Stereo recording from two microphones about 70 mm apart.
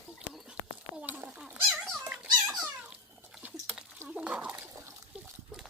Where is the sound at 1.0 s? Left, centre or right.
Right.